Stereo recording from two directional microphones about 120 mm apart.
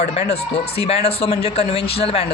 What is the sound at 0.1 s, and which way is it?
Speech, 55° left (ahead or behind).